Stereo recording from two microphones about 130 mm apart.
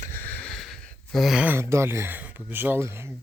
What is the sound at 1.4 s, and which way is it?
Speech, 20° right (ahead or behind).